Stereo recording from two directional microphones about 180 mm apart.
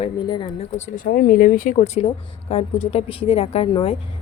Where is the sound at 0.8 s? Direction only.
50° left (ahead or behind); by 3.9 s 30° left (ahead or behind).